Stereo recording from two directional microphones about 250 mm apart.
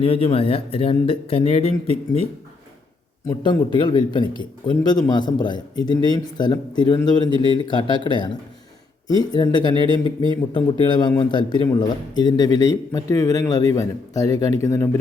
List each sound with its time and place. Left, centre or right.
0.0 s speech: left
3.2 s a man's voice: centre